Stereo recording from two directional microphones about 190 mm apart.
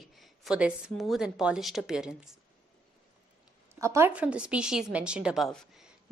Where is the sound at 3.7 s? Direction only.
15° right (ahead or behind).